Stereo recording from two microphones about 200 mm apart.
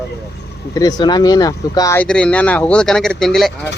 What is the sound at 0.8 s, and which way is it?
Speech, 20° left (ahead or behind).